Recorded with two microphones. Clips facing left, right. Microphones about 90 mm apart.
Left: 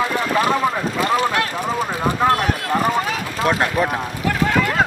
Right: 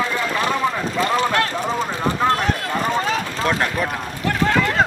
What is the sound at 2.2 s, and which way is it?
Clip-clop, 10° left (ahead or behind).